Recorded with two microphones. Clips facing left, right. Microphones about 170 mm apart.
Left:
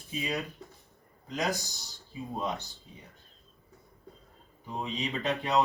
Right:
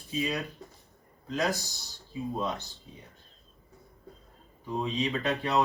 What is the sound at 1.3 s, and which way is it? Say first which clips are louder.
Speech: right 2 dB; 20° left (ahead or behind).